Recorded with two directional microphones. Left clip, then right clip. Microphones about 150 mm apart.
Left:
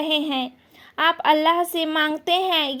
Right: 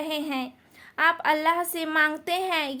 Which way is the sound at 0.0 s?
40° left (ahead or behind).